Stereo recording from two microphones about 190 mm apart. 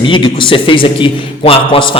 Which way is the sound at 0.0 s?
25° left (ahead or behind).